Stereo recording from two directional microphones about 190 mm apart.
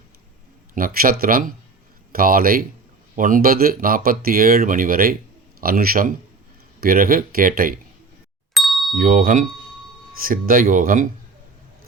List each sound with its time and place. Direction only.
0.7 s speech: 50° right (ahead or behind)
8.5 s ding: centre (ahead or behind)
9.0 s speech: 45° right (ahead or behind)